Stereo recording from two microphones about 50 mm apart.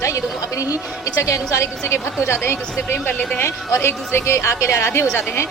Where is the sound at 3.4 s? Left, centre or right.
Left.